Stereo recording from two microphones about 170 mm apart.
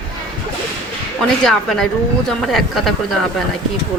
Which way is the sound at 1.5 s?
5° left (ahead or behind).